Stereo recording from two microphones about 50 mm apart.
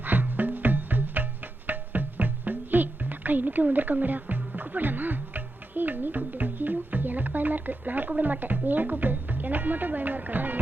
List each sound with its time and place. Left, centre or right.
0.0 s music: right